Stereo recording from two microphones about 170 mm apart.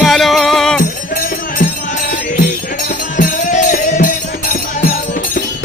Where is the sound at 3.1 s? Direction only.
45° left (ahead or behind).